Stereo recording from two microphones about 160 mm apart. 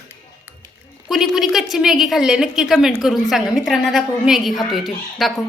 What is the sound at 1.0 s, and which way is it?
A woman's voice, centre (ahead or behind).